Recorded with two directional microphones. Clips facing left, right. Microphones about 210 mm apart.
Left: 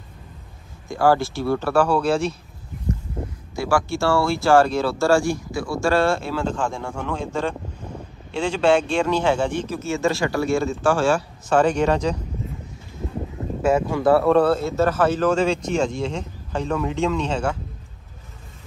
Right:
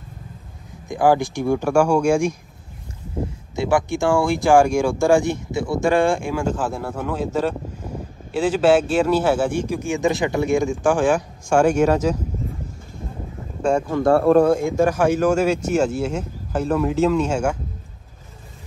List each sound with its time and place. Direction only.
0.8 s speech: 15° right (ahead or behind)
3.5 s speech: 20° right (ahead or behind)
13.6 s speech: 5° left (ahead or behind)
14.2 s speech: 10° right (ahead or behind)